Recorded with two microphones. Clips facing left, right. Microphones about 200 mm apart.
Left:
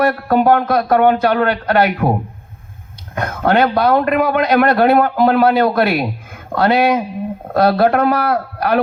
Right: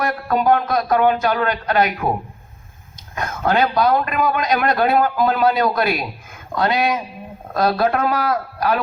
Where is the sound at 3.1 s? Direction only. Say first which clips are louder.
Left 4 dB; 60° left (ahead or behind).